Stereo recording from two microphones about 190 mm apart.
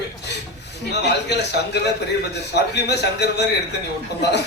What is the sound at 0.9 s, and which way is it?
Speech, 60° left (ahead or behind).